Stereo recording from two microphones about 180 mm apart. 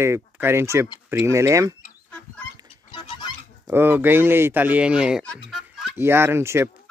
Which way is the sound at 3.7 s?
10° right (ahead or behind).